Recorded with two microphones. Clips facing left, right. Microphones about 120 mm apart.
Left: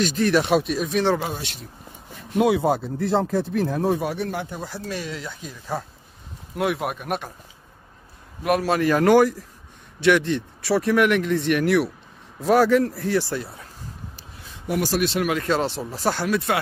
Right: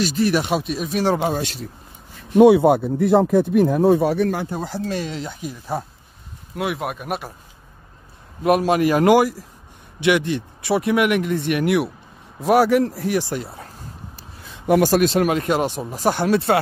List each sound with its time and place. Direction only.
0.0 s speech: 5° right (ahead or behind)
1.3 s speech: 40° right (ahead or behind)
2.3 s speech: 25° right (ahead or behind)
3.1 s speech: centre (ahead or behind)
3.5 s speech: 15° right (ahead or behind)
4.2 s speech: 45° right (ahead or behind); by 5.4 s 25° right (ahead or behind)
5.4 s speech: 15° right (ahead or behind)
6.5 s speech: centre (ahead or behind)
8.5 s speech: 20° right (ahead or behind)
14.7 s speech: 50° right (ahead or behind)
15.3 s speech: 15° right (ahead or behind)
16.3 s speech: 30° right (ahead or behind)